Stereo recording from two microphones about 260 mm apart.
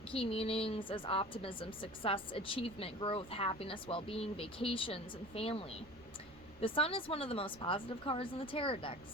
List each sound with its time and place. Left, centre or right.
0.1 s a woman's voice: left